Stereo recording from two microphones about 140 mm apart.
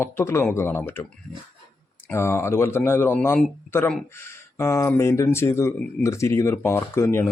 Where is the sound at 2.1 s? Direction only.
20° left (ahead or behind).